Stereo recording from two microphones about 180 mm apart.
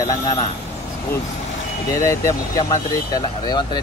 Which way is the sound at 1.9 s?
15° left (ahead or behind).